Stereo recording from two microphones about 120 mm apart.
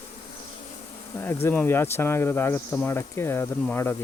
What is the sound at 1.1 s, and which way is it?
Speech, 20° left (ahead or behind).